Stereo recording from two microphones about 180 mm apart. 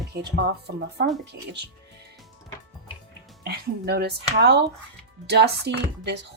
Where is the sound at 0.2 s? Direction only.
70° right (ahead or behind).